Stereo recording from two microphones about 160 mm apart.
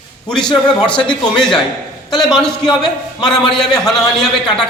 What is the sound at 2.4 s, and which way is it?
A man's voice, 5° left (ahead or behind).